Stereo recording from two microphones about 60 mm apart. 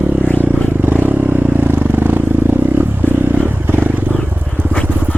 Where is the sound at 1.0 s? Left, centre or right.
Right.